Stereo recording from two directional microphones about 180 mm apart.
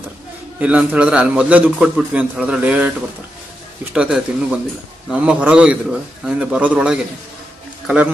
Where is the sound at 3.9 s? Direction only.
5° right (ahead or behind).